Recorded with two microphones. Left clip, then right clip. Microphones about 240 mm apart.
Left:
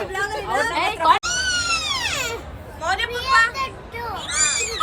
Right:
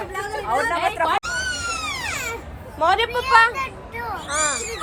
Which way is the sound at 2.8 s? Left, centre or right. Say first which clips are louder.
Right 4 dB; centre.